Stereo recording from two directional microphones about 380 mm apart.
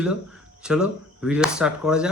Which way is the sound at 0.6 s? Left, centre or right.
Centre.